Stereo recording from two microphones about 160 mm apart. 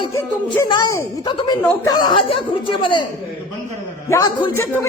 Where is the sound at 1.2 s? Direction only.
30° left (ahead or behind).